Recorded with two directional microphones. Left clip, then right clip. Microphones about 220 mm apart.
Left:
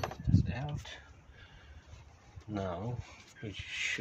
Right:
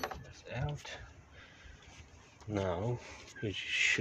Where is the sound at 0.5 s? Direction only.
40° right (ahead or behind).